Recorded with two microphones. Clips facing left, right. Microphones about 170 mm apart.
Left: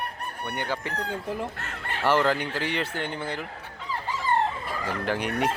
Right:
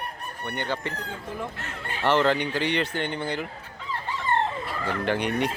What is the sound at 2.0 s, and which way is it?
Speech, 5° left (ahead or behind).